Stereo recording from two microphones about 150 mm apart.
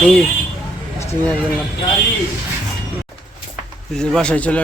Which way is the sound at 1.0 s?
20° left (ahead or behind).